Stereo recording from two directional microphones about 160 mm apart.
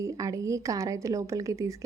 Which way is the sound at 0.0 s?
20° right (ahead or behind).